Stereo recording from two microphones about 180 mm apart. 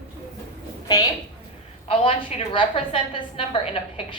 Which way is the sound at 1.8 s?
30° left (ahead or behind).